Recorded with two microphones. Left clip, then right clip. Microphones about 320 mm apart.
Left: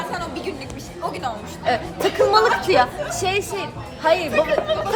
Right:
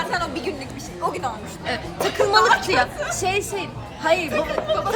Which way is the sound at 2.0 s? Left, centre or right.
Centre.